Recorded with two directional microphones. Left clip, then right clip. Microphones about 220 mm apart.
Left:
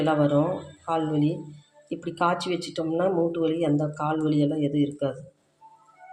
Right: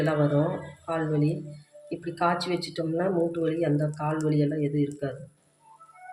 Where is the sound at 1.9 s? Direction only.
15° left (ahead or behind).